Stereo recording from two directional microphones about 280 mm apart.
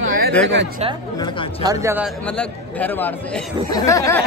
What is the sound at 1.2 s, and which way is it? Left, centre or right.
Speech, centre.